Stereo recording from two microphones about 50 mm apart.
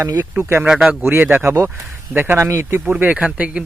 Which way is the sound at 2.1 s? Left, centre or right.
Right.